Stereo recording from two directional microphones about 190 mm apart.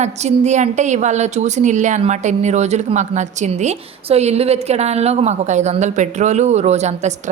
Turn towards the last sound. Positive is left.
turn(degrees=-35)  # may be behind; listen again after turning